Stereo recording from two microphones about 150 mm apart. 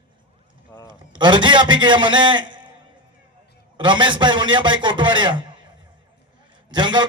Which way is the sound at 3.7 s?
30° right (ahead or behind).